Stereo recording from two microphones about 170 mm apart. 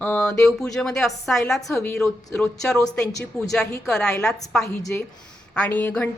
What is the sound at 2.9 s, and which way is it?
Speech, 5° left (ahead or behind).